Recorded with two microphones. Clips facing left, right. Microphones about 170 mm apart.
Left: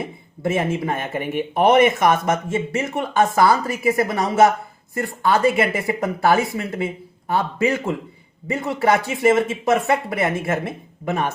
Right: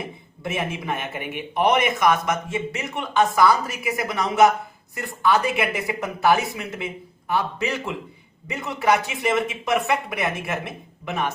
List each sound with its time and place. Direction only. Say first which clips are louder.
0.5 s speech: left 5 dB; 50° left (ahead or behind)